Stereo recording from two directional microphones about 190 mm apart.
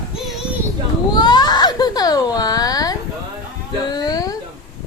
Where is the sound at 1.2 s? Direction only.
20° left (ahead or behind).